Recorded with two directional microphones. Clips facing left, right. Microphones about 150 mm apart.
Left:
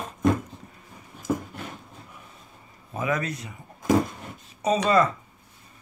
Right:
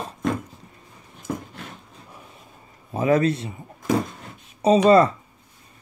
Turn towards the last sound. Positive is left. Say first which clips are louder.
# right 6 dB
turn(degrees=-35)  # may be behind; listen again after turning